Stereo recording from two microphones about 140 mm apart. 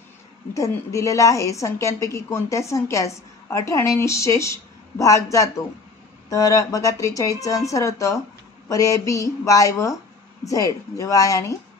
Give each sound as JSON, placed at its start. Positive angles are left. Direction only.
{"t": 0.6, "sound": "a woman's voice", "side_deg": 20}